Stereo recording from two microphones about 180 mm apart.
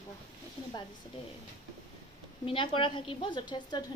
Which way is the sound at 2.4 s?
30° left (ahead or behind).